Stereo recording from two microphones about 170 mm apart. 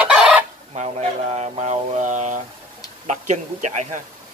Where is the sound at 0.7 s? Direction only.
40° right (ahead or behind).